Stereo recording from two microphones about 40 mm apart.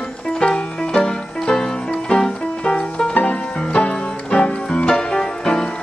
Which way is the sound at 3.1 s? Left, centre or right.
Left.